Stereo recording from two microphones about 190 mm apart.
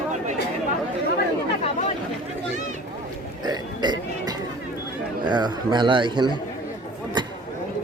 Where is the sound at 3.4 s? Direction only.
20° right (ahead or behind).